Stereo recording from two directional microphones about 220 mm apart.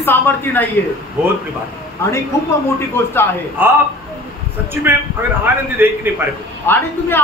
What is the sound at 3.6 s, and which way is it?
Speech, 10° right (ahead or behind).